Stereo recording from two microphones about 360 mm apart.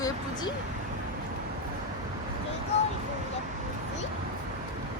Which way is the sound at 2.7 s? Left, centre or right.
Centre.